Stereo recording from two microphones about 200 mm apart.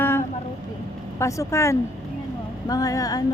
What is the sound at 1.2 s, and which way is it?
A woman's voice, 15° left (ahead or behind).